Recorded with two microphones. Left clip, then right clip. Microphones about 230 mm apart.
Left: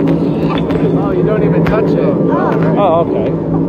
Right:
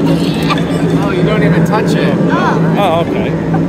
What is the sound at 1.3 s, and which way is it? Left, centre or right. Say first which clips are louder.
Speech: right 1 dB; right.